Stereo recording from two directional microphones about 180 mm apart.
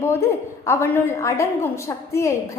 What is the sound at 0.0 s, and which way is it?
A woman's voice, 15° left (ahead or behind).